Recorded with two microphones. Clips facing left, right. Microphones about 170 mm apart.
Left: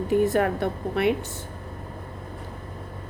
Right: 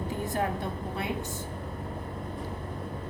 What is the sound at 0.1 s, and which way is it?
A woman's voice, 70° left (ahead or behind).